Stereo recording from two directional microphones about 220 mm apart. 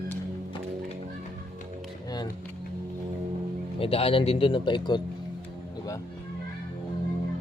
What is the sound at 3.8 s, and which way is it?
Speech, 25° left (ahead or behind).